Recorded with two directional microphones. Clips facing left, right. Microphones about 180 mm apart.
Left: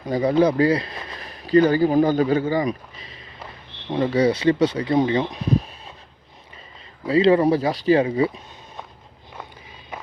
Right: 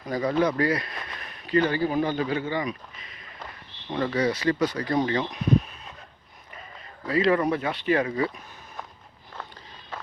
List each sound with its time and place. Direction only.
0.0 s speech: 25° left (ahead or behind)
3.8 s speech: 25° left (ahead or behind)
7.1 s speech: 30° left (ahead or behind)
9.9 s a sound: 15° left (ahead or behind)